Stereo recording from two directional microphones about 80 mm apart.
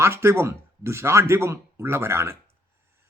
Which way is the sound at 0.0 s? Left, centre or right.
Right.